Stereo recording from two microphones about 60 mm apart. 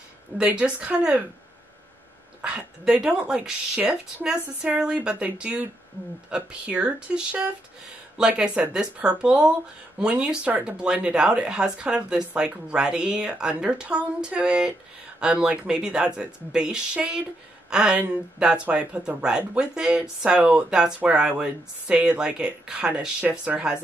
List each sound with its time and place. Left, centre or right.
0.3 s speech: right
0.7 s speech: centre
2.8 s speech: centre
5.2 s speech: right